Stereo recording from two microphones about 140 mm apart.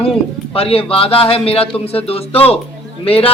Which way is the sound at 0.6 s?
45° left (ahead or behind).